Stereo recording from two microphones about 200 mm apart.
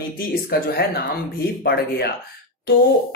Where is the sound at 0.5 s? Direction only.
50° left (ahead or behind).